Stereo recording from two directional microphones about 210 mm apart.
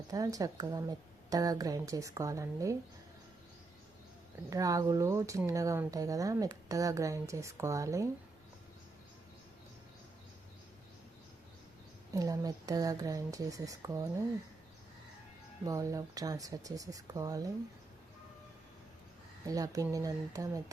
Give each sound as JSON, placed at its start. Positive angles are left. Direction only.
{"t": 0.1, "sound": "speech", "side_deg": -15}
{"t": 4.4, "sound": "speech", "side_deg": -15}
{"t": 12.1, "sound": "speech", "side_deg": -15}
{"t": 15.6, "sound": "speech", "side_deg": -15}
{"t": 19.5, "sound": "speech", "side_deg": -15}